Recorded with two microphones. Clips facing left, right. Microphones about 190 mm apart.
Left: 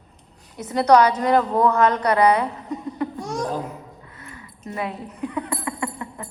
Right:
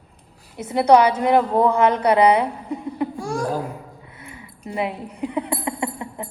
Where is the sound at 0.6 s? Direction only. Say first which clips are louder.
Right 1 dB; 25° right (ahead or behind).